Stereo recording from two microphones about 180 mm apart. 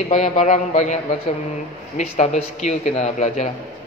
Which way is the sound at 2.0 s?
40° left (ahead or behind).